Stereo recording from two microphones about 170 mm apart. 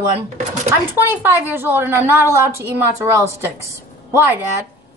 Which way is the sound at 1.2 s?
15° right (ahead or behind).